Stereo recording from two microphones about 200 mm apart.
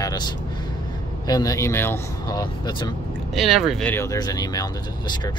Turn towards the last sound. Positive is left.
turn(degrees=20)  # may be behind; listen again after turning